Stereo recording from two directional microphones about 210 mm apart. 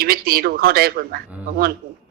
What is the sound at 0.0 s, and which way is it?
Speech, 45° right (ahead or behind).